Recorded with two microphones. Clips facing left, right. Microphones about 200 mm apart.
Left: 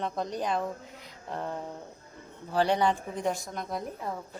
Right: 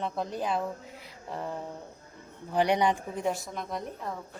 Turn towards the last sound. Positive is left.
turn(degrees=5)  # may be behind; listen again after turning